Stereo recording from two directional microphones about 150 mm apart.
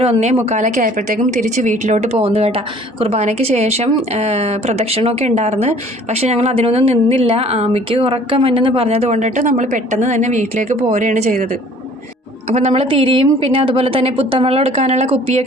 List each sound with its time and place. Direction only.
0.0 s a woman's voice: 45° right (ahead or behind)
12.5 s a woman's voice: 45° right (ahead or behind)